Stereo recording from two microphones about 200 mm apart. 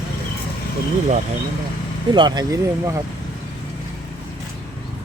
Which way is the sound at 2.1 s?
20° right (ahead or behind).